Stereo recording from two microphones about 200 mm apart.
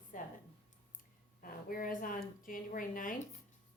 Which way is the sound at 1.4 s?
45° left (ahead or behind).